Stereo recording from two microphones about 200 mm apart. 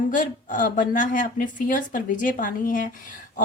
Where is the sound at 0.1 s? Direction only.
40° left (ahead or behind).